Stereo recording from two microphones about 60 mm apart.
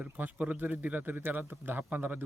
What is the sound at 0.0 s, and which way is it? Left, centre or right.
A man's voice, right.